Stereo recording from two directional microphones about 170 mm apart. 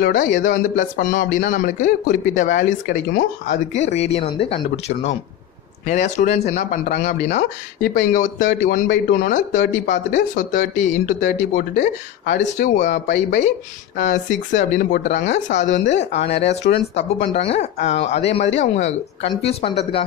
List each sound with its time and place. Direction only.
0.0 s speech: 55° left (ahead or behind)
11.1 s speech: 55° left (ahead or behind); by 19.7 s 35° left (ahead or behind)